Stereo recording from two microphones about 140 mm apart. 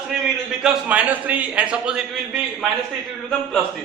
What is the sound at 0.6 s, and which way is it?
A man's voice, 5° right (ahead or behind).